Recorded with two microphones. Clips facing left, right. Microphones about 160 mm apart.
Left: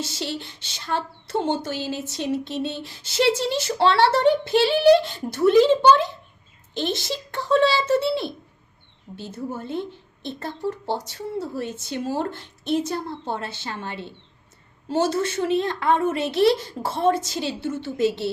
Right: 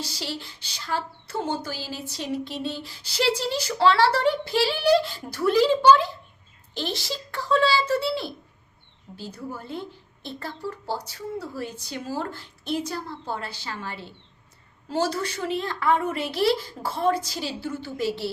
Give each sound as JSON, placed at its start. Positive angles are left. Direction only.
{"t": 0.0, "sound": "a woman's voice", "side_deg": 25}